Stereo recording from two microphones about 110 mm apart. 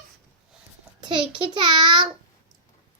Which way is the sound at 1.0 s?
45° right (ahead or behind).